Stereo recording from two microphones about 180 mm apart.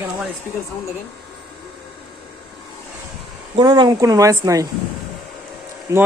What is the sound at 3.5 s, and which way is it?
Speech, 25° right (ahead or behind).